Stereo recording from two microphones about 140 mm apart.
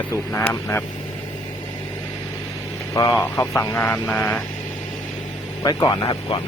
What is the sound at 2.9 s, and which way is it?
Speech, 25° left (ahead or behind).